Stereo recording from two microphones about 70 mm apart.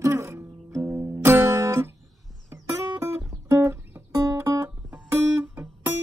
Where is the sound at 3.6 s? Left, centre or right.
Right.